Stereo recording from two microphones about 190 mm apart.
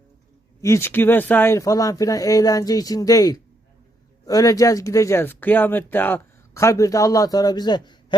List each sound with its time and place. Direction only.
0.6 s speech: 15° left (ahead or behind)